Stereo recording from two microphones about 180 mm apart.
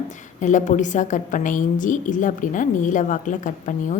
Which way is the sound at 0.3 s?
45° left (ahead or behind).